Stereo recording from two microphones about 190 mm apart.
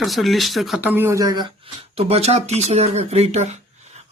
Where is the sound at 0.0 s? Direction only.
Centre (ahead or behind); by 1.5 s 20° right (ahead or behind).